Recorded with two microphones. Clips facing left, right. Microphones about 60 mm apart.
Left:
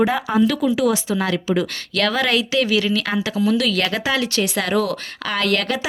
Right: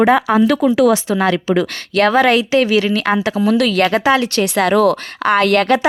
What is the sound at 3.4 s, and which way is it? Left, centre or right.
Speech, right.